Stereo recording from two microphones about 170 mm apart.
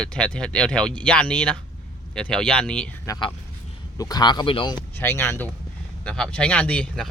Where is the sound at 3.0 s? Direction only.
20° left (ahead or behind).